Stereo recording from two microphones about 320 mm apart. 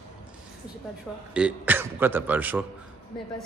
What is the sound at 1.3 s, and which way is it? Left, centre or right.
Speech, centre.